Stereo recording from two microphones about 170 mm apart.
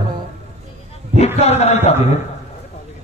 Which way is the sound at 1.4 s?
40° left (ahead or behind).